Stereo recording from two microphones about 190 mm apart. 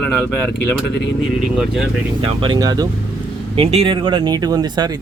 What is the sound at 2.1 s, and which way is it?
Speech, 25° right (ahead or behind).